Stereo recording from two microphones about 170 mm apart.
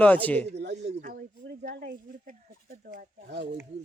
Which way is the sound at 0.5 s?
85° right.